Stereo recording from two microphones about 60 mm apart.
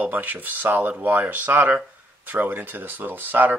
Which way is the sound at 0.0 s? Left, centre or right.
Right.